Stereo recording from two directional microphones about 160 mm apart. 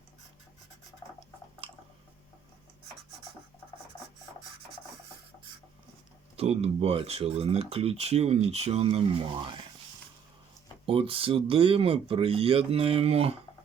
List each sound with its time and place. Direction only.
1.6 s a sound: 35° right (ahead or behind)
6.3 s speech: 40° right (ahead or behind)
10.8 s speech: 35° right (ahead or behind)